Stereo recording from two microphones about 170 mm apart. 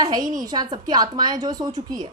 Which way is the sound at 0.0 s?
20° right (ahead or behind).